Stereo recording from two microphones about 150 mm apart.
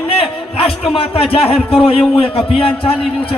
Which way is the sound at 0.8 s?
40° left (ahead or behind).